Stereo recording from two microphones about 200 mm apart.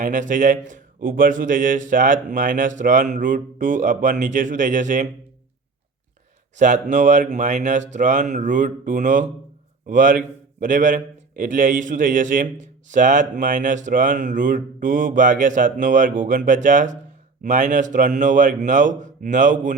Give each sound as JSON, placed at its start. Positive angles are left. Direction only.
{"t": 0.0, "sound": "a man's voice", "side_deg": -40}
{"t": 6.6, "sound": "a man's voice", "side_deg": -35}